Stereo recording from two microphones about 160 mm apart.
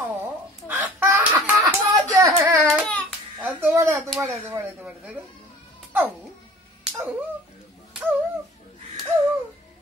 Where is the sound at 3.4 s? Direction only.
15° right (ahead or behind).